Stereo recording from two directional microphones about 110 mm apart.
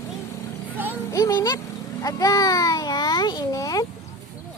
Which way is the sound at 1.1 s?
30° left (ahead or behind).